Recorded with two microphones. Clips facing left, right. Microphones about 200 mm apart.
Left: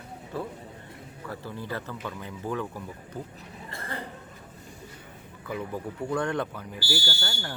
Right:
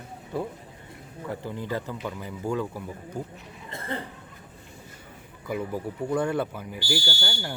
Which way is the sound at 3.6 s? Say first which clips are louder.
Right 4 dB; 20° right (ahead or behind).